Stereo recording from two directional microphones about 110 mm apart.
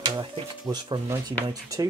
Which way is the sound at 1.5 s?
35° right (ahead or behind).